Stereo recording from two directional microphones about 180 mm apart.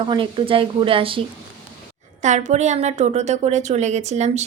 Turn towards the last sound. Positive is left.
turn(degrees=-40)  # may be behind; listen again after turning